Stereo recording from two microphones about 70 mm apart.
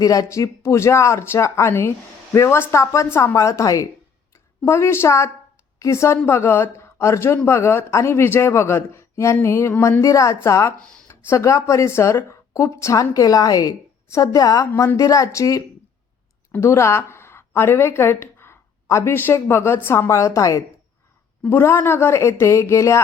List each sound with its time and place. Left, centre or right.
0.0 s speech: left
4.6 s a woman's voice: left
17.1 s a sound: left
19.1 s speech: left
21.5 s speech: left